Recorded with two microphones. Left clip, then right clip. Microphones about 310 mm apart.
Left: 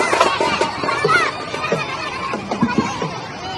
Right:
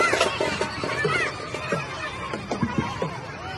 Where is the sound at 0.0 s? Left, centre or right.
Left.